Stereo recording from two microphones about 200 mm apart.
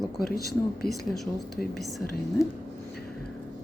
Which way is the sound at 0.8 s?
50° left (ahead or behind).